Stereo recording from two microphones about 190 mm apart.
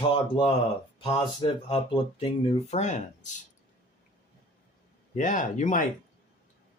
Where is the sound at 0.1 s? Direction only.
25° left (ahead or behind).